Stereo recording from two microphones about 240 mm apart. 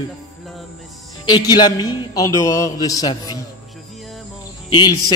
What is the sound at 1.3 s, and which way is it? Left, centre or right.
A man's voice, centre.